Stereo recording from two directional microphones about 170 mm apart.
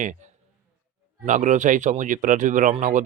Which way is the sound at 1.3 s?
45° right (ahead or behind).